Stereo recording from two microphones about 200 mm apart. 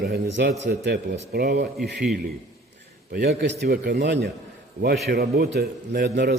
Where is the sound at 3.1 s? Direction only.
55° right (ahead or behind).